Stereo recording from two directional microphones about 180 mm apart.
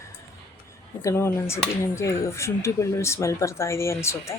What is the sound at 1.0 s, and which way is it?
Speech, 15° left (ahead or behind).